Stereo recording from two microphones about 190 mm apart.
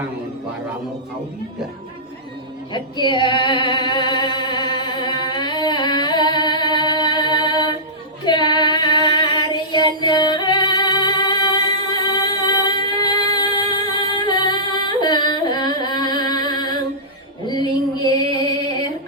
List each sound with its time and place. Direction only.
2.7 s singing: 25° left (ahead or behind)
8.2 s female singing: 25° left (ahead or behind)
17.4 s a sound: 20° left (ahead or behind)